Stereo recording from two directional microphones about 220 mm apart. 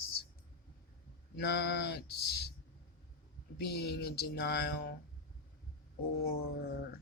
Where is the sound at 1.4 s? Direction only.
50° left (ahead or behind).